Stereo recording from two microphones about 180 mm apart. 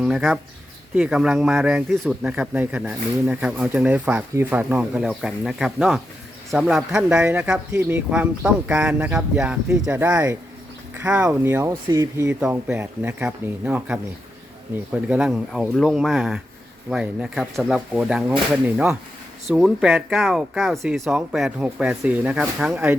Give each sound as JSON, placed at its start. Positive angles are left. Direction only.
{"t": 0.0, "sound": "speech", "side_deg": 0}
{"t": 15.1, "sound": "speech", "side_deg": -5}